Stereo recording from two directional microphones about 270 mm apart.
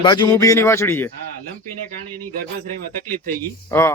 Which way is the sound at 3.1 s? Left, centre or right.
Right.